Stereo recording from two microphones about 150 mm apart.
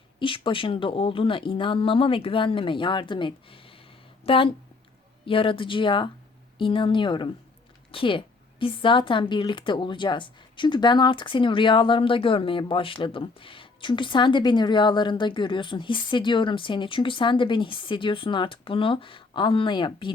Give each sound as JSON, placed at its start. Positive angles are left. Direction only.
{"t": 0.2, "sound": "a woman's voice", "side_deg": 35}